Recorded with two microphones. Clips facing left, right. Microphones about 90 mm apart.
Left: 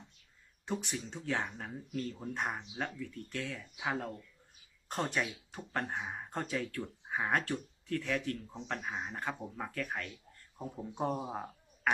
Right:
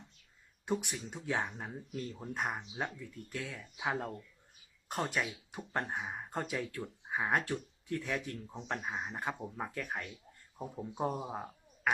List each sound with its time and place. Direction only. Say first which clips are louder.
0.6 s speech: right 2 dB; 10° right (ahead or behind)
2.6 s speech: even; 15° right (ahead or behind)
7.9 s speech: left 2 dB; 20° right (ahead or behind)
10.9 s speech: left 1 dB; centre (ahead or behind)